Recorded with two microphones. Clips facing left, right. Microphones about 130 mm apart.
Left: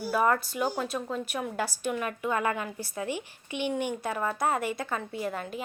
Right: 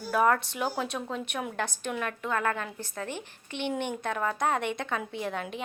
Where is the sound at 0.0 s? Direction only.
5° left (ahead or behind).